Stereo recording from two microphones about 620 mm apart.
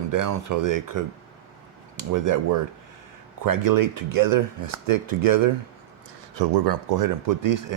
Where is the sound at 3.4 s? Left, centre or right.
Right.